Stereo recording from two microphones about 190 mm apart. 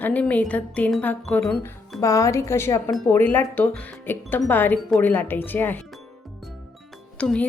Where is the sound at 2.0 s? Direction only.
15° left (ahead or behind).